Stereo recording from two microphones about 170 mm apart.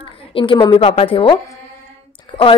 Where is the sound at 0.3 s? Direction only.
30° left (ahead or behind).